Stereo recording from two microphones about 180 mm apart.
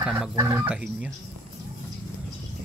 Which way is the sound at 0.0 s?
5° right (ahead or behind).